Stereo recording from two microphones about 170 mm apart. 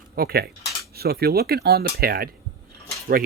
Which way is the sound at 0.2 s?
65° right (ahead or behind).